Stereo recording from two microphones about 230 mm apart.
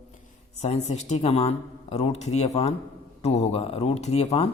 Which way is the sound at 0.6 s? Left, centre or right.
Left.